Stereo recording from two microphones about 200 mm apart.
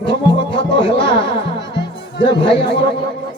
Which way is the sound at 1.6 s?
60° left (ahead or behind).